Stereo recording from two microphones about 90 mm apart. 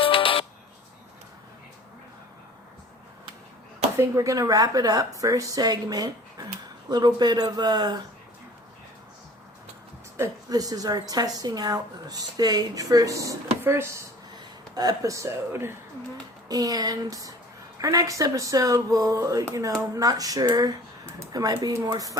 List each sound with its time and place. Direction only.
0.0 s music: 80° left
3.9 s speech: 30° right (ahead or behind); by 7.9 s 55° right (ahead or behind)
10.5 s speech: 45° right (ahead or behind)
13.6 s speech: 30° right (ahead or behind)
14.8 s speech: 45° right (ahead or behind)
16.5 s speech: 45° right (ahead or behind)